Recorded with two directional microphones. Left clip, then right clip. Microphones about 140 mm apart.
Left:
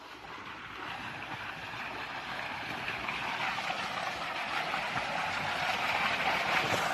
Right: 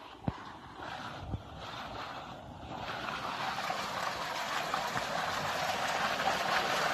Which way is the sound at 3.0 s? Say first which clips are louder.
Left 1 dB; 30° right (ahead or behind).